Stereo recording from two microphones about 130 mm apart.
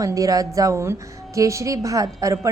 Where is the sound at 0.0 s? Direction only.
25° right (ahead or behind).